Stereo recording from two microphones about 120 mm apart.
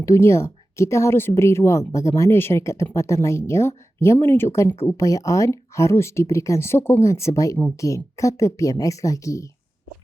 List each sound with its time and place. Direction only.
0.0 s a woman's voice: 25° left (ahead or behind)